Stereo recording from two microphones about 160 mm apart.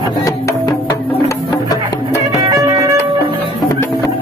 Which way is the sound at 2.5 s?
20° right (ahead or behind).